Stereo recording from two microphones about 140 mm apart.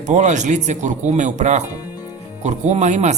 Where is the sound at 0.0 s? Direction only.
60° right (ahead or behind).